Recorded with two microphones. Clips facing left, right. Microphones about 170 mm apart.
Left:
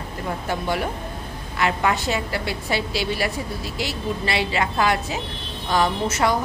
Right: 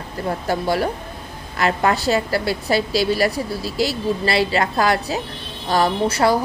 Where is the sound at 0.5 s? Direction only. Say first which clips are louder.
Right 5 dB; 35° right (ahead or behind).